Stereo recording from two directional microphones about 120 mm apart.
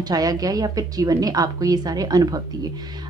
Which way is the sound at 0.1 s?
30° right (ahead or behind).